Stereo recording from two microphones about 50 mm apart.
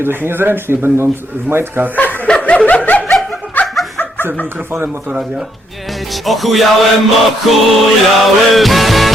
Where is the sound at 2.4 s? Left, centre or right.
Left.